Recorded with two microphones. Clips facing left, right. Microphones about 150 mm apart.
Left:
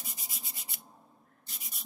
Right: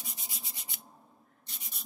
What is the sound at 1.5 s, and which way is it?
Rub, centre (ahead or behind).